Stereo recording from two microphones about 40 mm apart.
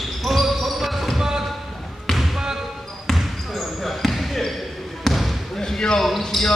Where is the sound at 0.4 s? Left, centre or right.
Centre.